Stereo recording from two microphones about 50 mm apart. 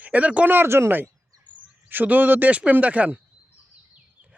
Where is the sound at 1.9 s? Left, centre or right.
Right.